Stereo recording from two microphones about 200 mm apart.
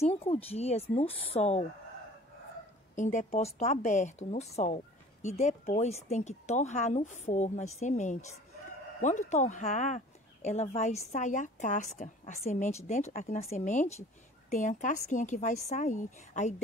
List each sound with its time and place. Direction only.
0.0 s speech: 30° left (ahead or behind)
3.0 s speech: 40° left (ahead or behind)